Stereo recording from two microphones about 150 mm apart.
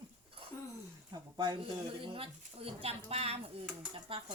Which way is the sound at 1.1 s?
30° right (ahead or behind).